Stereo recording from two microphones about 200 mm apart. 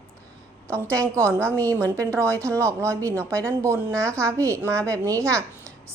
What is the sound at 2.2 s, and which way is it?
Speech, 5° left (ahead or behind).